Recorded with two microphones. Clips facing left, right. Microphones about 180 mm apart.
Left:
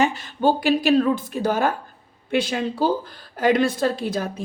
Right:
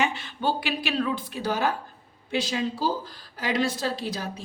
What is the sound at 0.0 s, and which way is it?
A woman's voice, 40° left (ahead or behind).